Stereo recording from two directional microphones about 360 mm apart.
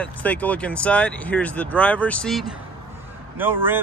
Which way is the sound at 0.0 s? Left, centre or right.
Centre.